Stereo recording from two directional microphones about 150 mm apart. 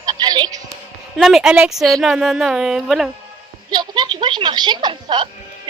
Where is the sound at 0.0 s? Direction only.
25° right (ahead or behind).